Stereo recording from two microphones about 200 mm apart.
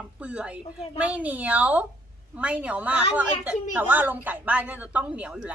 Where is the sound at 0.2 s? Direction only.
5° right (ahead or behind).